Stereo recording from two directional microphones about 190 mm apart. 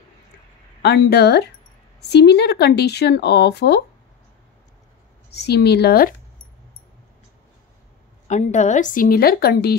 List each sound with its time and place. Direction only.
0.8 s speech: 60° left (ahead or behind)
5.5 s speech: 60° left (ahead or behind)
8.3 s a woman's voice: 40° left (ahead or behind); by 9.8 s 55° left (ahead or behind)